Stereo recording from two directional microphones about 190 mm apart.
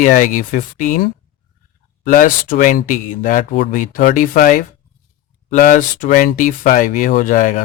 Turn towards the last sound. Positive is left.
turn(degrees=45)  # may be behind; listen again after turning